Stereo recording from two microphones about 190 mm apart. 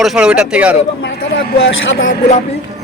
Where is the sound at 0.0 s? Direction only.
5° right (ahead or behind).